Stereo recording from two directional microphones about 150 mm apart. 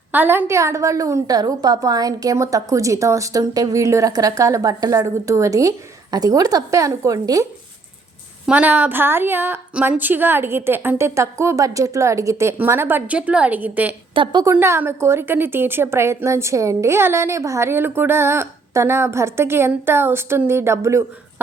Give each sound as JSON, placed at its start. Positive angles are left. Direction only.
{"t": 0.1, "sound": "a woman's voice", "side_deg": -15}
{"t": 8.4, "sound": "a woman's voice", "side_deg": -10}
{"t": 14.1, "sound": "a woman's voice", "side_deg": -35}
{"t": 14.4, "sound": "a woman's voice", "side_deg": -15}